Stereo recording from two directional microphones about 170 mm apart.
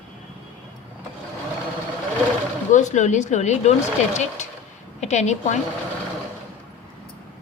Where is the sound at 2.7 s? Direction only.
45° left (ahead or behind).